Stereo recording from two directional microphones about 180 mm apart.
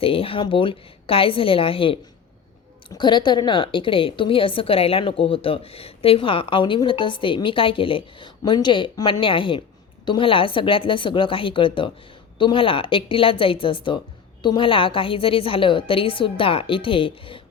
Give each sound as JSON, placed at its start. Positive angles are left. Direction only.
{"t": 0.0, "sound": "a woman's voice", "side_deg": 30}